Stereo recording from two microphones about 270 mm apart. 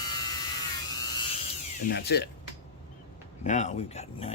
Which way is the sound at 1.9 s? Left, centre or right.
Left.